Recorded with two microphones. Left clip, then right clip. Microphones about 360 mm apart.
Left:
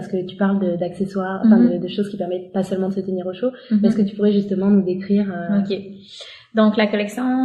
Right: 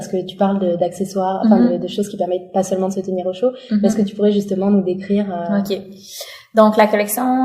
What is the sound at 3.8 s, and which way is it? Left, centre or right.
Speech, centre.